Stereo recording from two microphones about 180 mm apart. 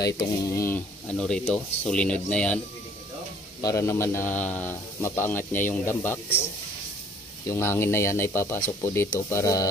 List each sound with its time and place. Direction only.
0.0 s a man's voice: 20° left (ahead or behind)
3.6 s a man's voice: 15° left (ahead or behind)
7.4 s a man's voice: 15° left (ahead or behind)